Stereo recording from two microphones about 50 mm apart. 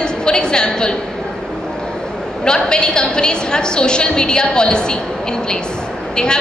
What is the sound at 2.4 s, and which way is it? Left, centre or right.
A woman's voice, centre.